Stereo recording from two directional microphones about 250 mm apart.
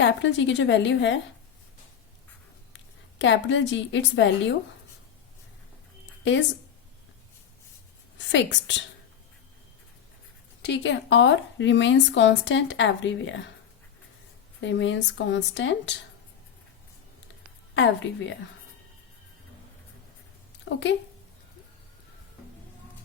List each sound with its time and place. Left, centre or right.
0.0 s a woman's voice: left
2.7 s a woman's voice: left
8.2 s a woman's voice: left
10.6 s a woman's voice: left
14.6 s a woman's voice: left
20.7 s speech: left